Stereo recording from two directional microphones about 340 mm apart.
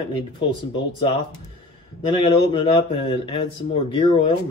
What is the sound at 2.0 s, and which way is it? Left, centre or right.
A man's voice, centre.